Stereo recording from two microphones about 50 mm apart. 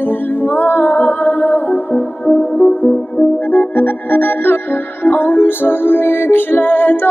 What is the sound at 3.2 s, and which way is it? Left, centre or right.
Music, left.